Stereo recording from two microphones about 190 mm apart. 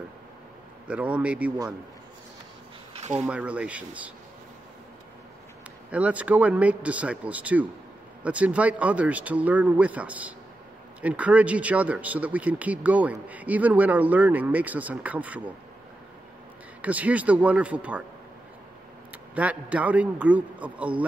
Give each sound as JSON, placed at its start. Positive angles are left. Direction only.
{"t": 0.8, "sound": "speech", "side_deg": -5}
{"t": 2.9, "sound": "a sound", "side_deg": -35}
{"t": 3.2, "sound": "speech", "side_deg": -5}
{"t": 5.9, "sound": "speech", "side_deg": -5}
{"t": 16.8, "sound": "speech", "side_deg": -10}
{"t": 19.3, "sound": "speech", "side_deg": -5}